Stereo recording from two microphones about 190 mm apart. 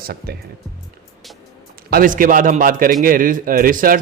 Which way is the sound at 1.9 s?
45° right (ahead or behind).